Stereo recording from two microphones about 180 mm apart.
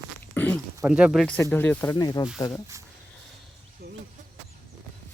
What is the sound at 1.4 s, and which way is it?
Speech, 10° left (ahead or behind).